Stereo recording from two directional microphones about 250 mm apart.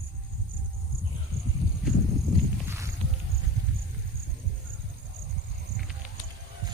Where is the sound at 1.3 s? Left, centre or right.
Right.